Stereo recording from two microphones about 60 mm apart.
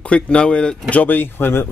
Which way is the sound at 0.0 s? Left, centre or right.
Centre.